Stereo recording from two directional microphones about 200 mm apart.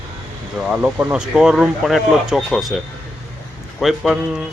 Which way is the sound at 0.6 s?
5° right (ahead or behind).